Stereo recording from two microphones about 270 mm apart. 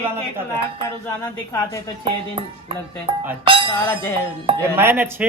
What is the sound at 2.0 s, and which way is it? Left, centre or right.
Speech, centre.